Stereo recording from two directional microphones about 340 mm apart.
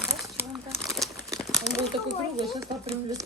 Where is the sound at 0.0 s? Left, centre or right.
Centre.